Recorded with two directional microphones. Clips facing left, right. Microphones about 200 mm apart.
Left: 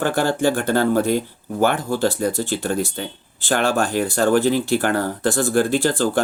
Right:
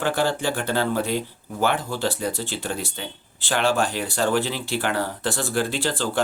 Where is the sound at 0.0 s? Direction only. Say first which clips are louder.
Left 4 dB; 45° left (ahead or behind).